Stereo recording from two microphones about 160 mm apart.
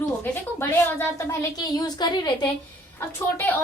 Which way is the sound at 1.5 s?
25° left (ahead or behind).